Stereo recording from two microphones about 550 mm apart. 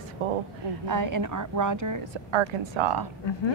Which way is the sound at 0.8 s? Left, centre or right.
Right.